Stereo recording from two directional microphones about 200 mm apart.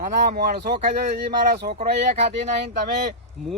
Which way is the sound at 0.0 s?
50° right (ahead or behind).